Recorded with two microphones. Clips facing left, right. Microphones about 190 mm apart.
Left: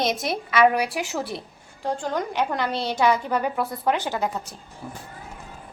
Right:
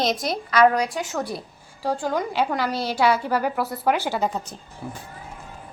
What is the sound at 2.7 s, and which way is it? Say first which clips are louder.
Speech: right 1 dB; 25° left (ahead or behind).